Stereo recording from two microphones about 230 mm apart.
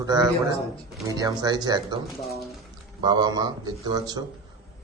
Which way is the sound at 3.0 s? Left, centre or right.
Centre.